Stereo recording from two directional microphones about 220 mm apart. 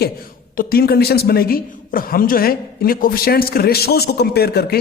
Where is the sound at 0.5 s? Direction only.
45° left (ahead or behind).